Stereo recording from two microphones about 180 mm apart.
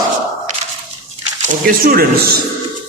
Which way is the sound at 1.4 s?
50° right (ahead or behind).